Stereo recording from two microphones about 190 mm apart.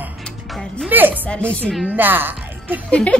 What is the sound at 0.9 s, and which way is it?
Speech, 10° right (ahead or behind).